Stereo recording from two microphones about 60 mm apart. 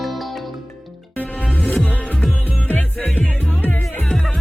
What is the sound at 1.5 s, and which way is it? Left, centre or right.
Music, centre.